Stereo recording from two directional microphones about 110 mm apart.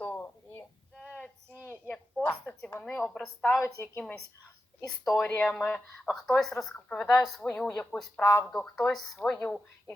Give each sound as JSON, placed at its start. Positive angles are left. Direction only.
{"t": 0.0, "sound": "a sound", "side_deg": 15}
{"t": 2.9, "sound": "speech", "side_deg": 10}
{"t": 5.1, "sound": "speech", "side_deg": 15}
{"t": 9.4, "sound": "speech", "side_deg": 20}